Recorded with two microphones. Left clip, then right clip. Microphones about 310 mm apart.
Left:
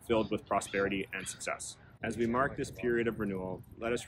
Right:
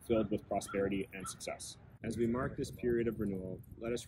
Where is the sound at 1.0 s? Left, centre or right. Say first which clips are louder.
Left 4 dB; centre.